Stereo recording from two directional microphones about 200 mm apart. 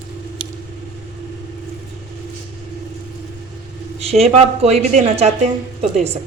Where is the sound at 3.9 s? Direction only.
30° right (ahead or behind).